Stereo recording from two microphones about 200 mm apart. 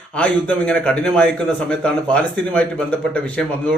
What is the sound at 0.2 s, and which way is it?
A man's voice, 5° left (ahead or behind).